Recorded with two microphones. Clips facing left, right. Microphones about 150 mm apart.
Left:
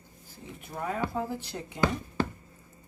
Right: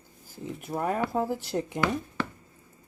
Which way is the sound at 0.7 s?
45° right (ahead or behind).